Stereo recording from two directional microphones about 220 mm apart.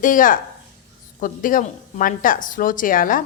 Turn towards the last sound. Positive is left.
turn(degrees=40)  # may be behind; listen again after turning